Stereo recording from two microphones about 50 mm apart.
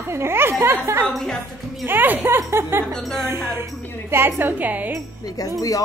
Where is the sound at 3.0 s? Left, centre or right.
Centre.